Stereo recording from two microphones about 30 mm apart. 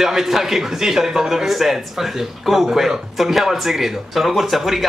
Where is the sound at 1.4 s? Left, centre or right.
Centre.